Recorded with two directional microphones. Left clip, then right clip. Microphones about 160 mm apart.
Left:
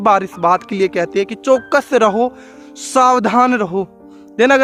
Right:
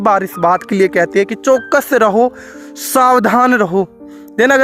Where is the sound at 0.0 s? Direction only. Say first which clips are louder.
Right 1 dB; 30° right (ahead or behind).